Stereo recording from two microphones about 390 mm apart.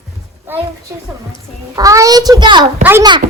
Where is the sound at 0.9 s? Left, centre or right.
Centre.